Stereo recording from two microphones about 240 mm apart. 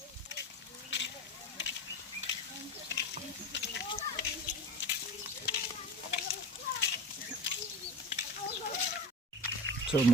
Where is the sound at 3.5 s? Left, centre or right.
Left.